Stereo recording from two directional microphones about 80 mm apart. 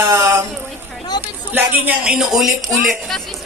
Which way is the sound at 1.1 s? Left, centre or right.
Left.